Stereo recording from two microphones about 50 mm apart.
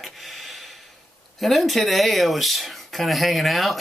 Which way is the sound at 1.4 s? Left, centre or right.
Centre.